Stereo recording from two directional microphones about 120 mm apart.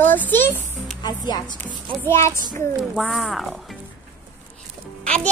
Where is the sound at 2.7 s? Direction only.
Centre (ahead or behind).